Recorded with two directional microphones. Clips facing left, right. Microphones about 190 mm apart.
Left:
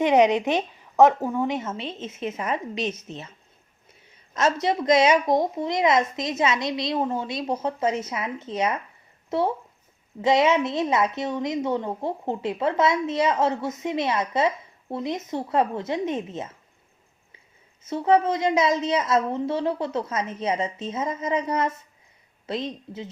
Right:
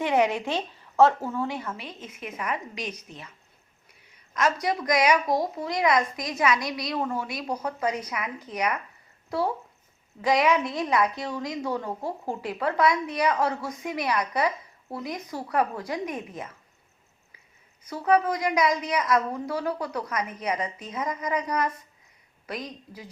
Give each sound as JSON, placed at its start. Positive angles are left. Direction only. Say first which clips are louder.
{"t": 0.0, "sound": "a woman's voice", "louder": "left 5 dB", "side_deg": 20}
{"t": 17.8, "sound": "a woman's voice", "louder": "left 3 dB", "side_deg": 25}